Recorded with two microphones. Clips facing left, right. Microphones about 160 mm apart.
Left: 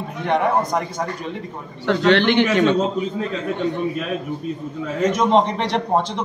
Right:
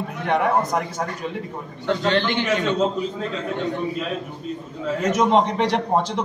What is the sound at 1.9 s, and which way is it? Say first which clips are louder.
Speech: left 5 dB; 75° left (ahead or behind).